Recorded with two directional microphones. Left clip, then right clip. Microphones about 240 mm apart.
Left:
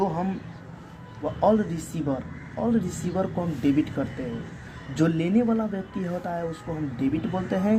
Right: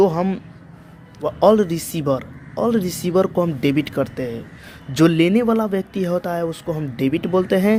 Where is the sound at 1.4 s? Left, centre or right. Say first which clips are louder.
Right 8 dB; right.